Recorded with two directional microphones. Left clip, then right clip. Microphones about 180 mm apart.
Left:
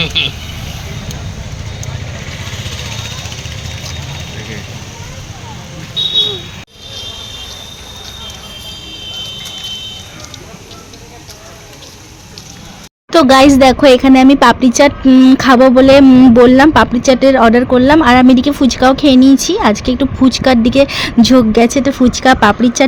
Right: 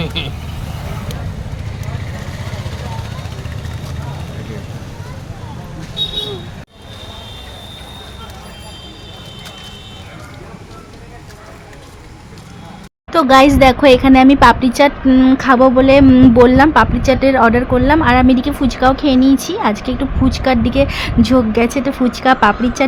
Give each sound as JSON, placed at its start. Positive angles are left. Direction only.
{"t": 0.0, "sound": "speech", "side_deg": 0}
{"t": 13.1, "sound": "speech", "side_deg": 30}
{"t": 16.0, "sound": "speech", "side_deg": 15}